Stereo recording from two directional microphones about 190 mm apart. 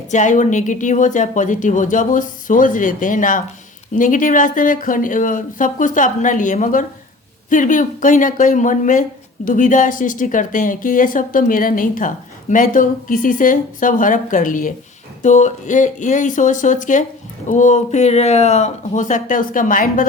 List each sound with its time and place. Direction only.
0.1 s speech: 40° left (ahead or behind)